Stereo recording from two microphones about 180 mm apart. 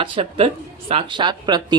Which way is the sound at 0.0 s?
30° right (ahead or behind).